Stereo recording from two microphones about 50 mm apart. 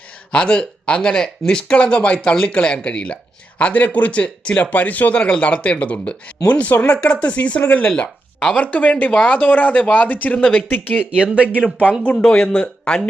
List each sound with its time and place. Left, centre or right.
0.3 s speech: left
7.9 s a sound: left
8.5 s speech: left
11.2 s speech: centre
11.4 s speech: left
12.1 s speech: centre